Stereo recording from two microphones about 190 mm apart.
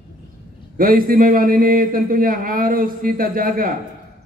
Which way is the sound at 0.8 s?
50° right (ahead or behind).